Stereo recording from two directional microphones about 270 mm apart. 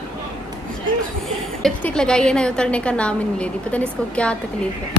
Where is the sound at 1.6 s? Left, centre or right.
Centre.